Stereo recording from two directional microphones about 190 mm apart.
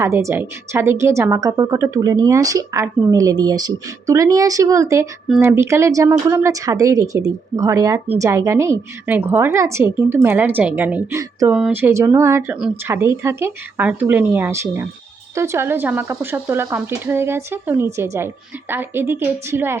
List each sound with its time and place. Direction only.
0.0 s a woman's voice: 15° right (ahead or behind)
11.5 s a woman's voice: 5° right (ahead or behind)